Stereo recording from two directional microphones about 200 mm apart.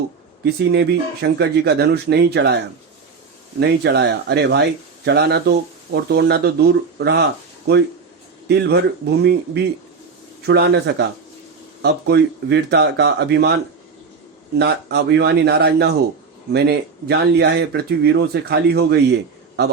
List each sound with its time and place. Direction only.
0.4 s speech: 55° right (ahead or behind)
3.6 s speech: 55° right (ahead or behind)
8.4 s speech: 55° right (ahead or behind)
10.4 s speech: 55° right (ahead or behind)
14.6 s speech: 55° right (ahead or behind)